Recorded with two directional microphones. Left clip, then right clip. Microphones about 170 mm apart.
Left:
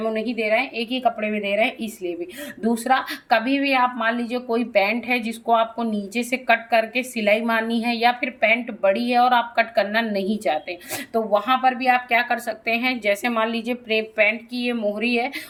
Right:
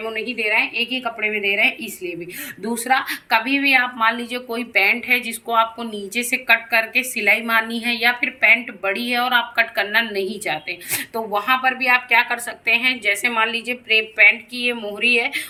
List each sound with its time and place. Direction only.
0.0 s a woman's voice: 50° left (ahead or behind)